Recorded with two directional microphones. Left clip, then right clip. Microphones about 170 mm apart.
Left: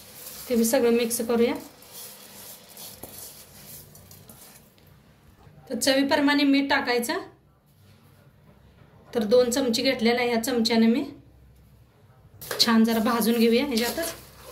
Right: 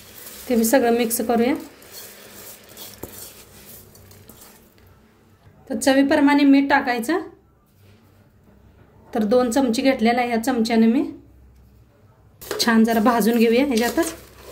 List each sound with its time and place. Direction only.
0.5 s a woman's voice: 55° right (ahead or behind)
5.7 s a woman's voice: 55° right (ahead or behind)
9.1 s a woman's voice: 60° right (ahead or behind)
12.5 s a woman's voice: 55° right (ahead or behind)